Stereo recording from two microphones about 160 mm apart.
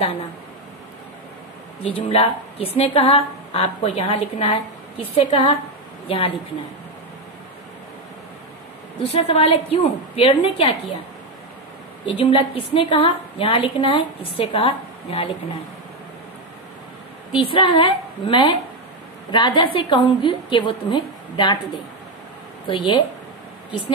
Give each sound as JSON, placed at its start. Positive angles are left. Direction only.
{"t": 1.8, "sound": "a woman's voice", "side_deg": 40}
{"t": 9.1, "sound": "a woman's voice", "side_deg": 35}
{"t": 12.1, "sound": "a woman's voice", "side_deg": 35}
{"t": 17.3, "sound": "a woman's voice", "side_deg": 30}
{"t": 22.7, "sound": "a woman's voice", "side_deg": 30}